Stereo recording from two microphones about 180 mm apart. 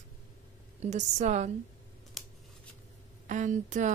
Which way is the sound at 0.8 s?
40° right (ahead or behind).